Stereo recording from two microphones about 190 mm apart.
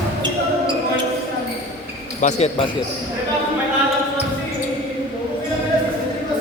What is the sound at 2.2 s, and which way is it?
Speech, 35° left (ahead or behind).